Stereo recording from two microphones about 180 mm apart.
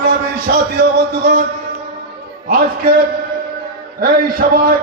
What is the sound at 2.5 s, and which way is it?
Speech, 55° right (ahead or behind).